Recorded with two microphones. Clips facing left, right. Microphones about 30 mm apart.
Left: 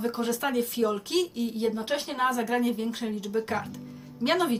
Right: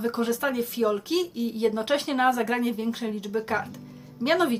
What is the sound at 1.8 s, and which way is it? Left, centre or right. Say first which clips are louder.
Speech: right 4 dB; right.